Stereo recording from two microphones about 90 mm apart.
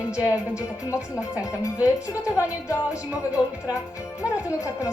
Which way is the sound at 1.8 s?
15° right (ahead or behind).